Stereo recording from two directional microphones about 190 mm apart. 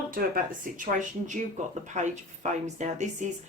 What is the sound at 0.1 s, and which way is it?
Speech, 45° right (ahead or behind).